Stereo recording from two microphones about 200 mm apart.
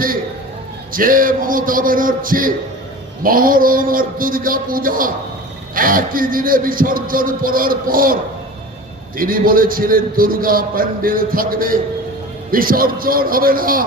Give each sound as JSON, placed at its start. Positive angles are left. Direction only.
{"t": 0.9, "sound": "a man's voice", "side_deg": -45}